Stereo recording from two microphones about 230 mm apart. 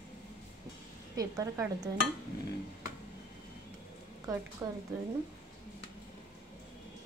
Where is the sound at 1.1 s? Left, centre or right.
Centre.